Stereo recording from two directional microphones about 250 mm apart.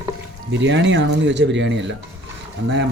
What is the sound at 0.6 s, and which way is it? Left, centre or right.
Speech, right.